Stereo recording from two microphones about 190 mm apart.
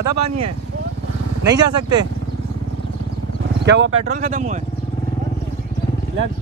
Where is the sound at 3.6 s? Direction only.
75° right (ahead or behind).